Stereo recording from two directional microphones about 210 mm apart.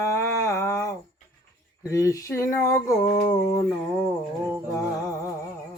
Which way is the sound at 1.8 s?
15° left (ahead or behind).